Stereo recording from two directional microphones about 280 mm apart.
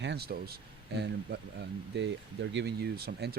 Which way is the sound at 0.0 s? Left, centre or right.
Right.